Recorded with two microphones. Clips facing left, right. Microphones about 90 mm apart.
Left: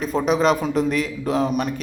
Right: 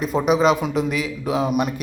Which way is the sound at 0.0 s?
5° right (ahead or behind).